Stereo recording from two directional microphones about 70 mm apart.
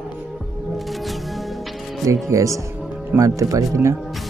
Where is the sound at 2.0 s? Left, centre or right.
Right.